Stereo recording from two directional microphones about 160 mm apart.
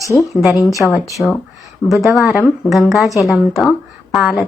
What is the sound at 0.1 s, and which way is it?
Speech, 20° left (ahead or behind).